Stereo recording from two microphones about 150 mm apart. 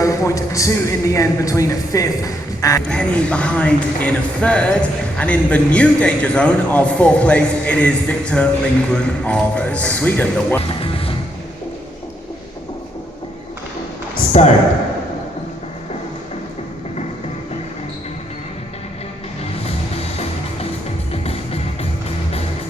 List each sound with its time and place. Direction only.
0.0 s speech: 20° left (ahead or behind)
2.9 s speech: 5° left (ahead or behind)
10.7 s music: 40° left (ahead or behind)
14.2 s a sound: 50° left (ahead or behind)
21.1 s music: 40° left (ahead or behind)